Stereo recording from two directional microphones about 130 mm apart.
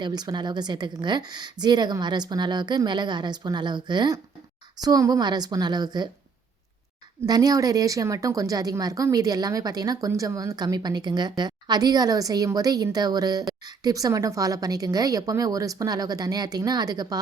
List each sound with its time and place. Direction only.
0.0 s a woman's voice: 30° right (ahead or behind)
7.3 s speech: 30° right (ahead or behind)